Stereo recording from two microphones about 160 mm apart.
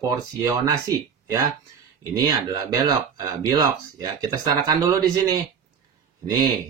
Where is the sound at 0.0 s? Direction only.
20° right (ahead or behind).